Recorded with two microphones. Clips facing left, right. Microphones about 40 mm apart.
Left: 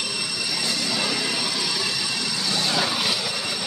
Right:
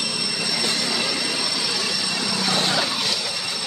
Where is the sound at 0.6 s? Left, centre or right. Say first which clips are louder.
Right 2 dB; right.